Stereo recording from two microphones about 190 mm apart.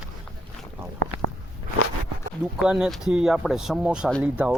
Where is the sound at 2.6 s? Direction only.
5° right (ahead or behind).